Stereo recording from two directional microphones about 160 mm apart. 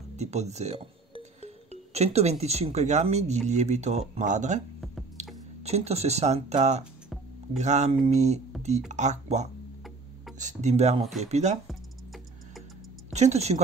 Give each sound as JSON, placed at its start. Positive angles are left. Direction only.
{"t": 0.2, "sound": "speech", "side_deg": -45}
{"t": 5.2, "sound": "squish", "side_deg": -45}
{"t": 5.6, "sound": "speech", "side_deg": -40}
{"t": 11.0, "sound": "speech", "side_deg": 0}
{"t": 11.2, "sound": "speech", "side_deg": -45}
{"t": 11.6, "sound": "music", "side_deg": 0}
{"t": 13.1, "sound": "speech", "side_deg": -45}